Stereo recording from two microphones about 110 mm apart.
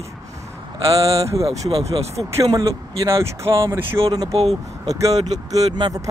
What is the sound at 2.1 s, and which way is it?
Speech, 30° right (ahead or behind).